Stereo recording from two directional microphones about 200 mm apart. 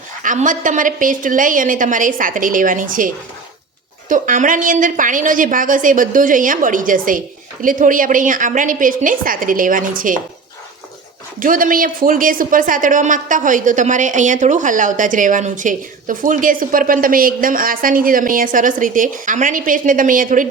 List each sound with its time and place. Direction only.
0.2 s speech: 40° right (ahead or behind)
4.1 s a woman's voice: 40° right (ahead or behind)
11.3 s speech: 45° right (ahead or behind)